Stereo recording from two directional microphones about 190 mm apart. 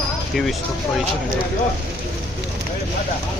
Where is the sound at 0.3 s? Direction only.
Centre (ahead or behind).